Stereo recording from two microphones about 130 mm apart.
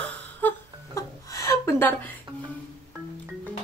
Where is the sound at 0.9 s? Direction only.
25° left (ahead or behind).